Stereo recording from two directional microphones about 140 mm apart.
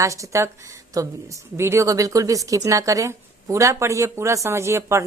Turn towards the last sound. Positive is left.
turn(degrees=-20)  # may be behind; listen again after turning